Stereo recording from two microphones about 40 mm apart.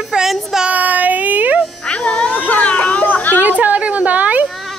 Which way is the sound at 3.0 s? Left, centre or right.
Left.